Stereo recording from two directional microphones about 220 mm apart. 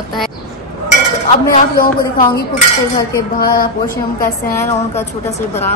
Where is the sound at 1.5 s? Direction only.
40° left (ahead or behind).